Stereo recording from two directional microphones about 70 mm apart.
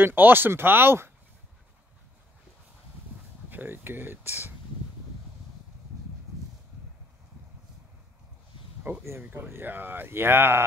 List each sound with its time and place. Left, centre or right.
0.0 s speech: right
3.4 s speech: right
8.8 s speech: right